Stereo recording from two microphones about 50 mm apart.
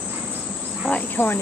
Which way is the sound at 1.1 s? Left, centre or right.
Left.